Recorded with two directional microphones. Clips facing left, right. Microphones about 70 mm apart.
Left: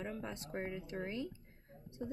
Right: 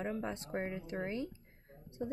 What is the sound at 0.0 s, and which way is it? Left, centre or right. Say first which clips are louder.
A woman's voice: right 5 dB; right.